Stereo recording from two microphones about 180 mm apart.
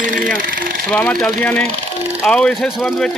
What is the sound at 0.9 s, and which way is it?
A man's voice, 5° left (ahead or behind).